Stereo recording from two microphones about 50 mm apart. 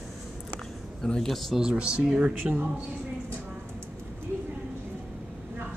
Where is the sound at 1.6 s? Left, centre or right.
Centre.